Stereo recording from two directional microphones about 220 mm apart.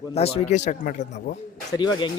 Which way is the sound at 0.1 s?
25° left (ahead or behind).